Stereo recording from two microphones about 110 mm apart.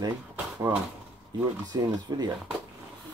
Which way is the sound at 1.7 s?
35° right (ahead or behind).